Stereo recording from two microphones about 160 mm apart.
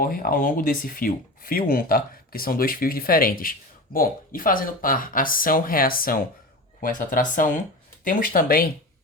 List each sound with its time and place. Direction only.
0.0 s speech: 60° left (ahead or behind)